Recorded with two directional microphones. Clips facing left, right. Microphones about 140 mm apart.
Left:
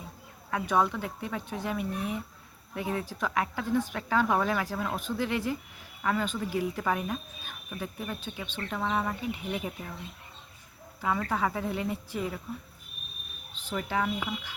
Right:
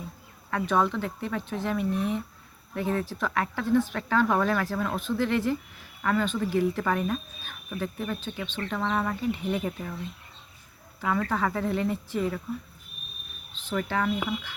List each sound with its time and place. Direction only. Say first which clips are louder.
0.5 s speech: right 2 dB; 10° left (ahead or behind)
11.0 s speech: right 2 dB; 15° left (ahead or behind)
13.5 s speech: right 3 dB; 10° left (ahead or behind)